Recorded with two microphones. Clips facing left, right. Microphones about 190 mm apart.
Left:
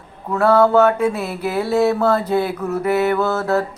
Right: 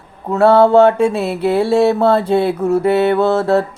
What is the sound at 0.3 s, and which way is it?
Mantra, 30° right (ahead or behind).